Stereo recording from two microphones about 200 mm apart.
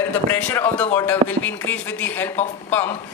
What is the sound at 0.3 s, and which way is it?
Speech, 10° left (ahead or behind).